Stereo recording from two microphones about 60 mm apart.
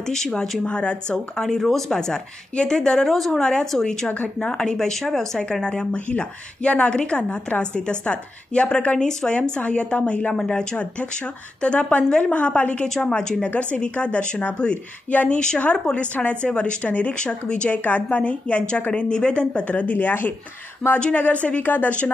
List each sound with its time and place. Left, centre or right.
0.0 s speech: centre
4.1 s a woman's voice: left